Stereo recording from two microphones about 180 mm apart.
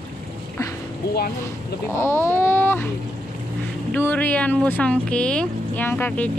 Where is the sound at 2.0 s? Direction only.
15° left (ahead or behind).